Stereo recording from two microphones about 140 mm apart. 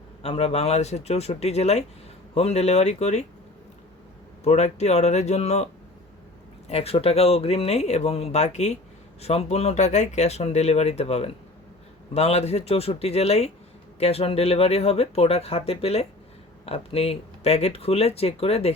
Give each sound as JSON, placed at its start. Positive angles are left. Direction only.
{"t": 0.2, "sound": "speech", "side_deg": 45}
{"t": 4.4, "sound": "speech", "side_deg": 55}
{"t": 6.7, "sound": "speech", "side_deg": 45}